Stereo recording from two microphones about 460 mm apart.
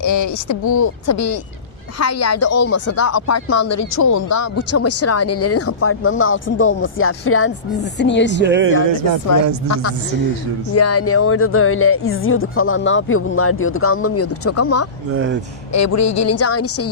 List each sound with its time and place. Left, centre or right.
0.0 s speech: left
8.4 s speech: right
9.6 s speech: left
15.1 s speech: right
15.7 s speech: left